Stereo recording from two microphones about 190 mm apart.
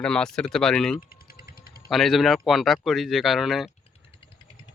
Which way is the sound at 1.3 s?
50° left (ahead or behind).